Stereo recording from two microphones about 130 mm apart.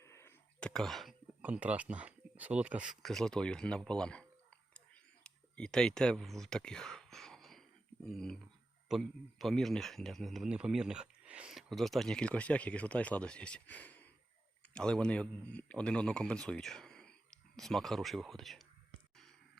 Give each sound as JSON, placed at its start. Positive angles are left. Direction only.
{"t": 0.0, "sound": "a sound", "side_deg": 20}
{"t": 0.6, "sound": "speech", "side_deg": 5}
{"t": 1.4, "sound": "speech", "side_deg": -10}